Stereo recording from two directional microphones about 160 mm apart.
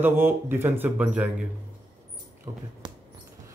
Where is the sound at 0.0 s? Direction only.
15° right (ahead or behind).